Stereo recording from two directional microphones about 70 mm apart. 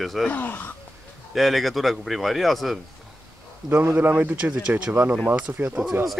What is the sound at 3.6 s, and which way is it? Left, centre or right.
A man's voice, right.